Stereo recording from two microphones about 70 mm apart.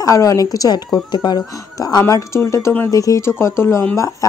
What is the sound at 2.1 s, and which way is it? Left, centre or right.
Speech, left.